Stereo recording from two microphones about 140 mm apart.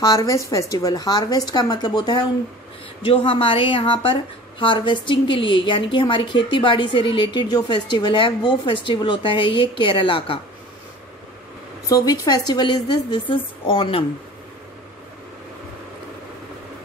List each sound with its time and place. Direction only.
0.0 s a woman's voice: 30° left (ahead or behind)
11.9 s a woman's voice: 25° left (ahead or behind)